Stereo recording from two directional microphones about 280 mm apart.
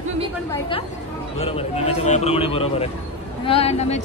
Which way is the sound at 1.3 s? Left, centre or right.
Centre.